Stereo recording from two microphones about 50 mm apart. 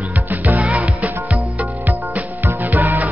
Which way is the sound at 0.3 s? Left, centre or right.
Right.